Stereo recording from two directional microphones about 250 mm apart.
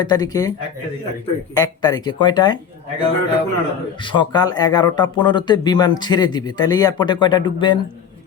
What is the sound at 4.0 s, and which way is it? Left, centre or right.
Speech, centre.